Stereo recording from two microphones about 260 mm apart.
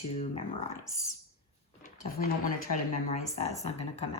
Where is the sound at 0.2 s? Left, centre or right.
Left.